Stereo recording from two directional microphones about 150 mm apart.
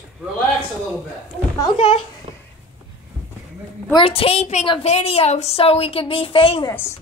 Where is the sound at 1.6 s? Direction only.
30° left (ahead or behind).